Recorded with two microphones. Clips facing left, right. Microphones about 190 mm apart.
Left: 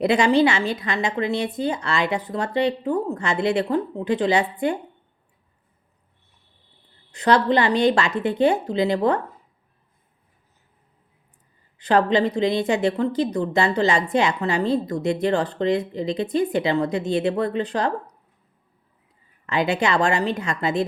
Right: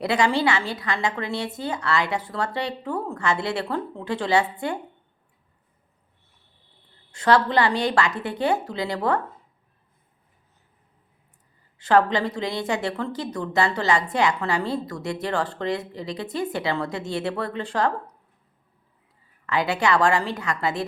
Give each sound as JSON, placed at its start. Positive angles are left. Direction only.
{"t": 0.0, "sound": "a woman's voice", "side_deg": 20}
{"t": 7.1, "sound": "a woman's voice", "side_deg": 20}
{"t": 11.8, "sound": "a woman's voice", "side_deg": 20}
{"t": 19.5, "sound": "a woman's voice", "side_deg": 20}